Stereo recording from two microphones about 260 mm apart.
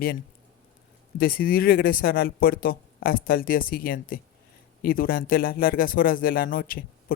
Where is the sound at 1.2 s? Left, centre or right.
Left.